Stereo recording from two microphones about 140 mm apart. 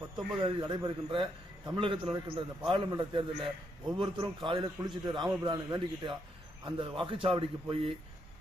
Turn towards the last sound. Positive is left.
turn(degrees=-40)  # may be behind; listen again after turning